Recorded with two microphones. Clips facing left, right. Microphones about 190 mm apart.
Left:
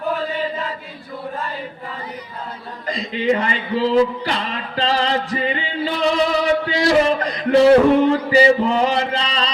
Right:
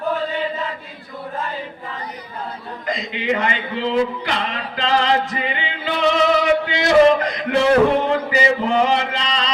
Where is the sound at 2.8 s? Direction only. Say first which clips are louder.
Left 4 dB; 35° left (ahead or behind).